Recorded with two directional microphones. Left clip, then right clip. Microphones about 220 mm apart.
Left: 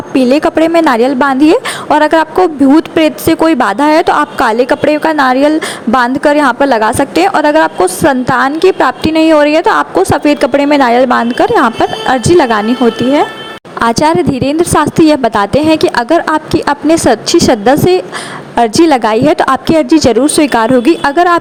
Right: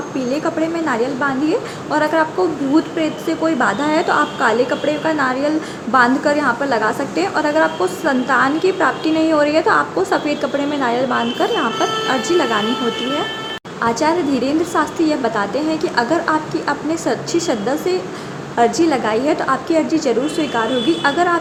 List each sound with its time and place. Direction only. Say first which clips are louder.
0.2 s a woman's voice: left 12 dB; 45° left (ahead or behind)
13.8 s a woman's voice: left 8 dB; 40° left (ahead or behind)